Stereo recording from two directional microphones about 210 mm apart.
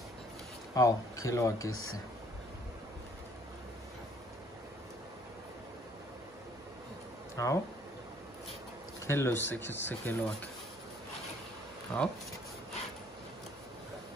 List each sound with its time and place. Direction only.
0.7 s speech: 15° left (ahead or behind)
1.7 s speech: 80° left
7.4 s speech: 15° left (ahead or behind)
9.0 s speech: 10° left (ahead or behind)
11.9 s speech: 5° left (ahead or behind)